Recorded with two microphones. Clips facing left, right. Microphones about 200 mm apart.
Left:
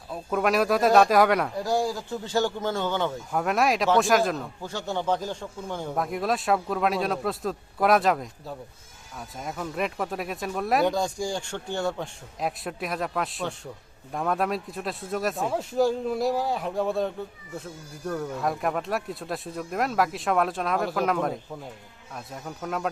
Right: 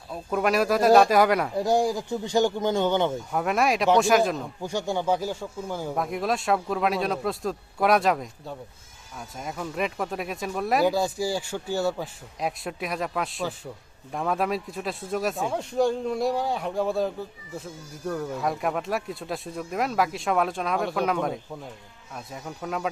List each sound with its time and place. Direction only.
0.1 s a man's voice: centre (ahead or behind)
1.6 s speech: 20° right (ahead or behind)
3.3 s a man's voice: centre (ahead or behind)
4.6 s a man's voice: 15° right (ahead or behind)